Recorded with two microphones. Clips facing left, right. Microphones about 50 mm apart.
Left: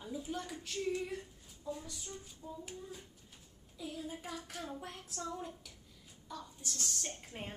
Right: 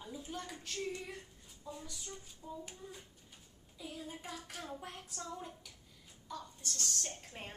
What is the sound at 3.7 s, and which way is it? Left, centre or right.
Hands, centre.